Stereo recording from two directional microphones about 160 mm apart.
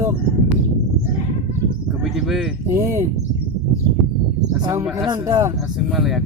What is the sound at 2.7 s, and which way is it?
Speech, 20° right (ahead or behind).